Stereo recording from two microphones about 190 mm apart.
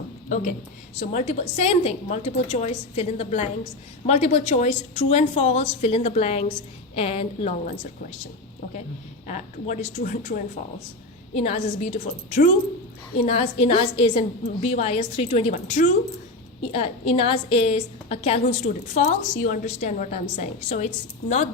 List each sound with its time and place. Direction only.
0.3 s a woman's voice: 45° left (ahead or behind)
9.2 s a woman's voice: 40° left (ahead or behind)
16.7 s a woman's voice: 30° left (ahead or behind)